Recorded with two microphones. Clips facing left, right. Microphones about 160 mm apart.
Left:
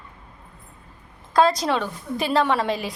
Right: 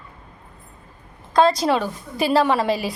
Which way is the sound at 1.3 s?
Centre (ahead or behind).